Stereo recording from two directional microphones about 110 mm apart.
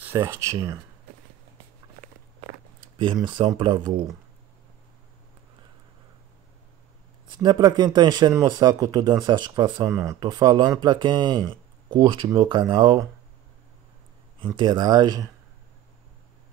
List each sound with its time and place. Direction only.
0.0 s speech: 20° right (ahead or behind)
3.3 s speech: 45° right (ahead or behind)
7.2 s speech: 40° right (ahead or behind)
9.8 s speech: 25° right (ahead or behind)
10.2 s speech: 40° right (ahead or behind)
14.6 s speech: 45° right (ahead or behind)